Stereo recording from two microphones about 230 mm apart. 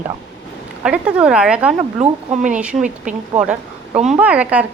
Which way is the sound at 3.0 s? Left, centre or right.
Right.